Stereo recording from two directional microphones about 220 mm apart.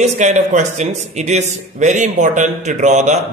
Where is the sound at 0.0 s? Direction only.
35° right (ahead or behind).